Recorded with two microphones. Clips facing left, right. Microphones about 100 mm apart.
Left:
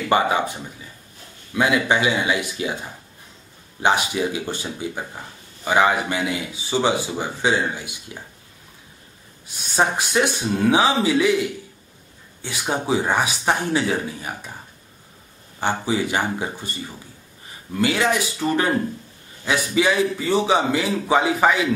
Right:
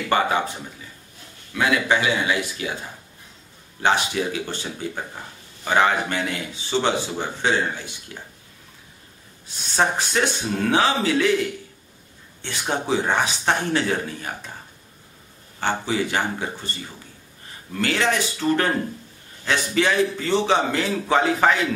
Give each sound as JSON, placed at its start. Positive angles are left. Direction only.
{"t": 0.1, "sound": "speech", "side_deg": 15}
{"t": 1.5, "sound": "speech", "side_deg": 20}
{"t": 3.8, "sound": "speech", "side_deg": 15}
{"t": 9.8, "sound": "speech", "side_deg": 10}
{"t": 15.6, "sound": "speech", "side_deg": 15}
{"t": 17.7, "sound": "speech", "side_deg": 10}